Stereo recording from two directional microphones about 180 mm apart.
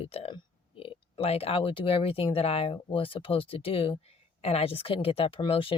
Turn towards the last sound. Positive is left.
turn(degrees=30)  # may be behind; listen again after turning